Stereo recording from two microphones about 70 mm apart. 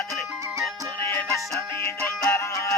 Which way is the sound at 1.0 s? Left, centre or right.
Left.